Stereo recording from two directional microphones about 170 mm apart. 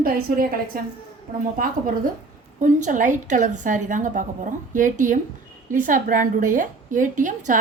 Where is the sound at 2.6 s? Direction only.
50° right (ahead or behind).